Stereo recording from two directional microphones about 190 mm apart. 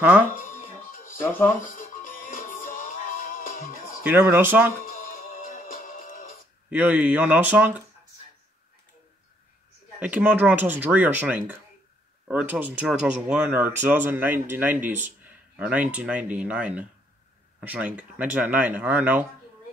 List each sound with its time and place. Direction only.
0.4 s music: 45° left (ahead or behind)
4.0 s speech: 10° right (ahead or behind)
4.8 s music: 45° left (ahead or behind)
6.7 s speech: 10° right (ahead or behind)
9.9 s speech: 10° right (ahead or behind)